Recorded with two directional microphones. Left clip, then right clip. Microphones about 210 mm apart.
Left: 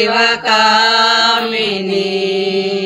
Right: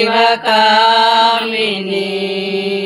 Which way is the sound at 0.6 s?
30° left (ahead or behind).